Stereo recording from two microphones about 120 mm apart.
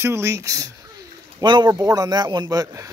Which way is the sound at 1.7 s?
25° right (ahead or behind).